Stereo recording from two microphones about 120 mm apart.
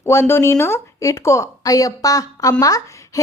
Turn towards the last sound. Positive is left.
turn(degrees=30)  # may be behind; listen again after turning